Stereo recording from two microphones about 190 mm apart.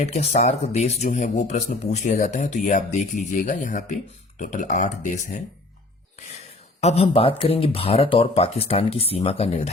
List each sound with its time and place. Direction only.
0.0 s speech: 35° left (ahead or behind)
6.8 s speech: 30° left (ahead or behind)